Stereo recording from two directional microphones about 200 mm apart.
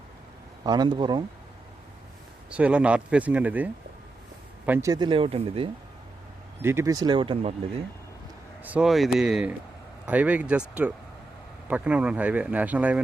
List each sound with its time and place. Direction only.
0.6 s speech: 20° right (ahead or behind)
2.5 s speech: 5° right (ahead or behind); by 5.6 s 25° right (ahead or behind)
6.6 s speech: 10° right (ahead or behind)
8.6 s speech: 5° right (ahead or behind)